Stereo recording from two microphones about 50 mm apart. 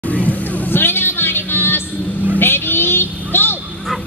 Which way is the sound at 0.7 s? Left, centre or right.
Left.